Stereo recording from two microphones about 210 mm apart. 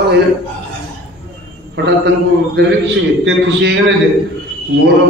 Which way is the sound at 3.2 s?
60° right (ahead or behind).